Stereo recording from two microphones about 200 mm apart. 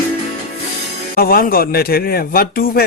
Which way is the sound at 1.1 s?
45° left (ahead or behind).